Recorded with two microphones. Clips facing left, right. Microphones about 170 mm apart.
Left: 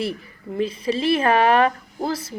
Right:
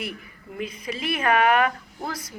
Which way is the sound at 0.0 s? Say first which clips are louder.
Left 8 dB; 30° left (ahead or behind).